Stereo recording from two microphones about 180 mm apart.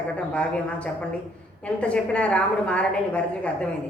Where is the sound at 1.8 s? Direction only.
5° left (ahead or behind).